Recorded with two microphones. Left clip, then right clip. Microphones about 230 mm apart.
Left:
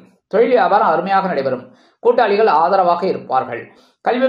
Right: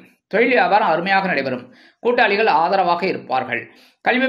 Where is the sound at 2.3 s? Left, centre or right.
Right.